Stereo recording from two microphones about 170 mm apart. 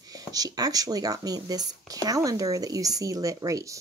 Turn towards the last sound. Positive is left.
turn(degrees=-20)  # may be behind; listen again after turning